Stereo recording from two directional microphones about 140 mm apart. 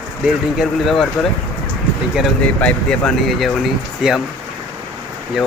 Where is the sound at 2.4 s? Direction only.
10° left (ahead or behind).